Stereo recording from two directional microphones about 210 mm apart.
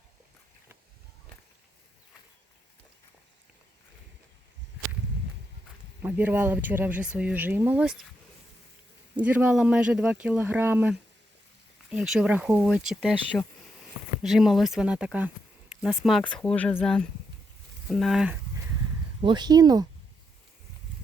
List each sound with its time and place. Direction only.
6.0 s speech: 10° right (ahead or behind)
9.1 s speech: 5° right (ahead or behind)
19.2 s speech: 20° right (ahead or behind)